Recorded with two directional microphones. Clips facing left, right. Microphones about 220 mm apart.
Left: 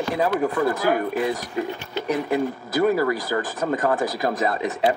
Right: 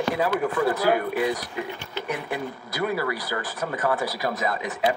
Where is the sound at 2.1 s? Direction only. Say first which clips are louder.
Left 8 dB; 40° left (ahead or behind).